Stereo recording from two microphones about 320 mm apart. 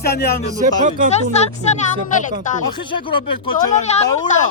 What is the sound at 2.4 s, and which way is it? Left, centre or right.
Speech, centre.